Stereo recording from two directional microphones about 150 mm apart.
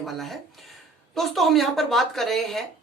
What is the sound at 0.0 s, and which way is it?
Speech, centre (ahead or behind).